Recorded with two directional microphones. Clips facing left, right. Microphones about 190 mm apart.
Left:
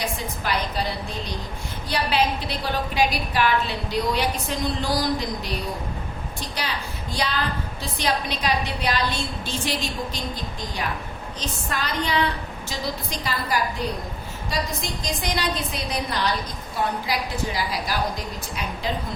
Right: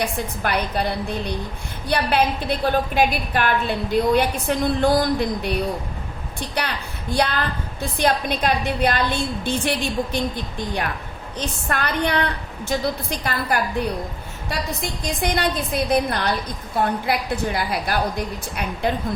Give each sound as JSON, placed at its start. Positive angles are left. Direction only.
{"t": 0.0, "sound": "a woman's voice", "side_deg": -60}
{"t": 6.6, "sound": "a woman's voice", "side_deg": -60}
{"t": 14.8, "sound": "a woman's voice", "side_deg": -55}